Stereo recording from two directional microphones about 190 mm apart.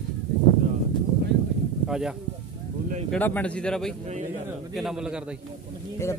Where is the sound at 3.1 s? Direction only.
10° left (ahead or behind).